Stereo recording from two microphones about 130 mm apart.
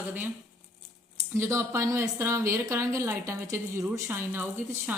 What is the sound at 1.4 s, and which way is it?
A woman's voice, 20° right (ahead or behind).